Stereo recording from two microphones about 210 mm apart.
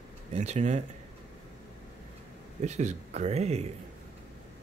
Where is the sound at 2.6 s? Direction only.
35° right (ahead or behind).